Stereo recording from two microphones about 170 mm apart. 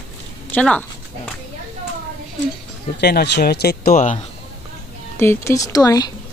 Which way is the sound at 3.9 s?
45° left (ahead or behind).